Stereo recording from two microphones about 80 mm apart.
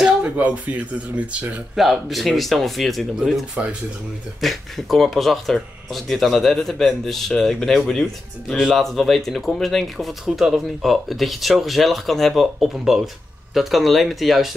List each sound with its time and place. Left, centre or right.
0.0 s speech: centre
1.8 s speech: centre
3.6 s speech: centre
4.4 s speech: centre